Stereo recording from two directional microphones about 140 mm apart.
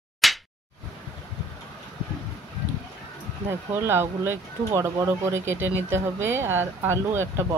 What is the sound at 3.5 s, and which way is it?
Speech, 15° right (ahead or behind).